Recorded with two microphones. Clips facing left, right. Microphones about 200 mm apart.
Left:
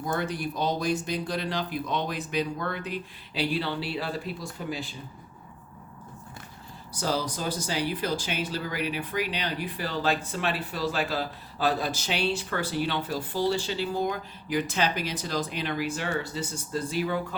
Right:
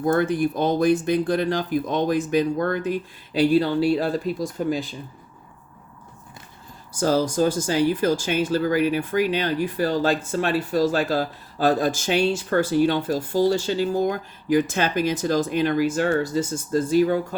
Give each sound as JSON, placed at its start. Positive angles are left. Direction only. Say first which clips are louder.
{"t": 0.0, "sound": "speech", "louder": "right 10 dB", "side_deg": -50}
{"t": 6.9, "sound": "speech", "louder": "right 9 dB", "side_deg": -45}